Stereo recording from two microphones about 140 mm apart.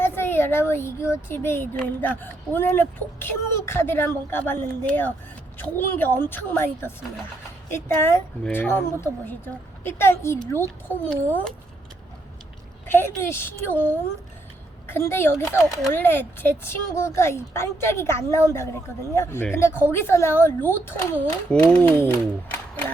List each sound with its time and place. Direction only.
0.0 s speech: 15° left (ahead or behind)
12.9 s speech: 15° left (ahead or behind)